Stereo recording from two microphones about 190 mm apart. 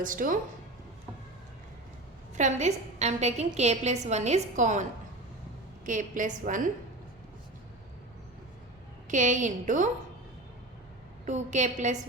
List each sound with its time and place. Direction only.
0.0 s a woman's voice: 45° right (ahead or behind)
2.3 s a woman's voice: 40° right (ahead or behind)
9.0 s a woman's voice: 40° right (ahead or behind)
11.3 s a woman's voice: 40° right (ahead or behind)